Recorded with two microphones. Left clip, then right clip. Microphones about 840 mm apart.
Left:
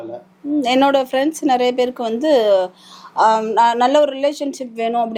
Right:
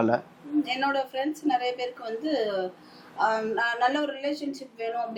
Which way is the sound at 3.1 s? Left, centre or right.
Left.